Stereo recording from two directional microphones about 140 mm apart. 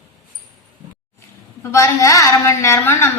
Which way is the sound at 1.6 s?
20° left (ahead or behind).